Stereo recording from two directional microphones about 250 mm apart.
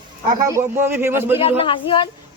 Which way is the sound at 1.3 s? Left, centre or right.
Left.